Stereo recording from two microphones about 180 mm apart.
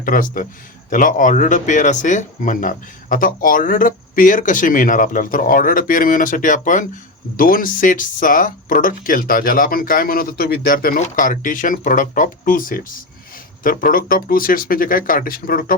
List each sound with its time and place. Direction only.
0.0 s speech: 50° left (ahead or behind)